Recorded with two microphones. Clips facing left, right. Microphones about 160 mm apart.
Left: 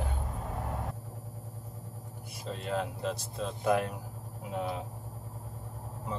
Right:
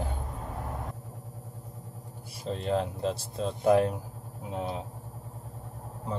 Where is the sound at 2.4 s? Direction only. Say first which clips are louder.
Right 5 dB; 35° right (ahead or behind).